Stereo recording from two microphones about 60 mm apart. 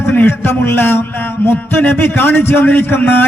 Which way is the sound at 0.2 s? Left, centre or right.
Left.